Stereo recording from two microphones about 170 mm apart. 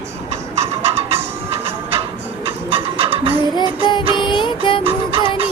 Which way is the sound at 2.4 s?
35° right (ahead or behind).